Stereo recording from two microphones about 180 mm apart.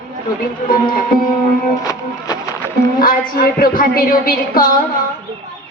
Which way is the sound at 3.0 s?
50° left (ahead or behind).